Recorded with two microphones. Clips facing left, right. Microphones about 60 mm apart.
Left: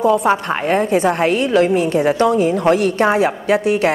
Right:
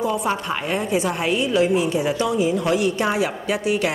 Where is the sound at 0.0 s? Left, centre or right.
Left.